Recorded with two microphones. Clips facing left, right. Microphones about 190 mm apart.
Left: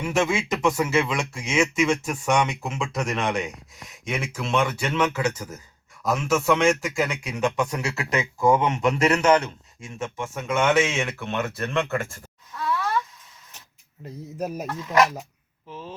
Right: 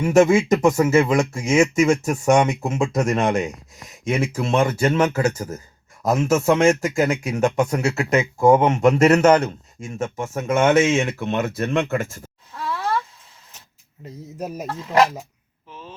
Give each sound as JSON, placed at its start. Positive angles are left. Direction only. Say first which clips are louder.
{"t": 0.0, "sound": "speech", "louder": "right 9 dB", "side_deg": -45}
{"t": 12.5, "sound": "a sound", "louder": "right 1 dB", "side_deg": -30}
{"t": 14.0, "sound": "speech", "louder": "left 1 dB", "side_deg": 0}
{"t": 14.7, "sound": "speech", "louder": "right 3 dB", "side_deg": -30}